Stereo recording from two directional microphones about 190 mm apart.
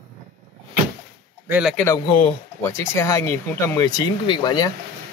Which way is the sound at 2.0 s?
30° left (ahead or behind).